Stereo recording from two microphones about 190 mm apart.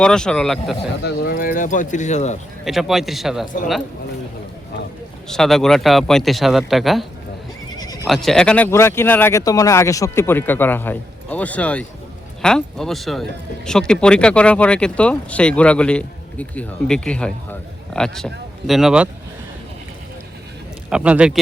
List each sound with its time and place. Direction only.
0.0 s speech: 5° left (ahead or behind)
1.0 s speech: 55° left (ahead or behind); by 2.4 s 35° left (ahead or behind)
2.6 s speech: centre (ahead or behind)
5.3 s speech: centre (ahead or behind)
7.8 s bleat: 20° left (ahead or behind)
8.0 s speech: centre (ahead or behind)
20.9 s speech: 5° right (ahead or behind)